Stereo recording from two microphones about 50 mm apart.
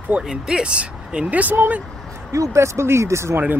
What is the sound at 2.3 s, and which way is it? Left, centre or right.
Speech, right.